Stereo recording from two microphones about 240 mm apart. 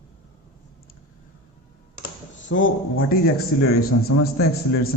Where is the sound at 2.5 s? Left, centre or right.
Left.